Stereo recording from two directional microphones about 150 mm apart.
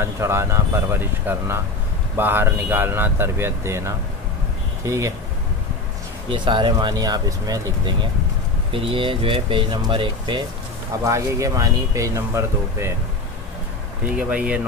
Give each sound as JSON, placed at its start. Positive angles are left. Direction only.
{"t": 0.0, "sound": "speech", "side_deg": -15}
{"t": 6.2, "sound": "speech", "side_deg": -30}
{"t": 11.1, "sound": "speech", "side_deg": -20}
{"t": 14.1, "sound": "speech", "side_deg": -5}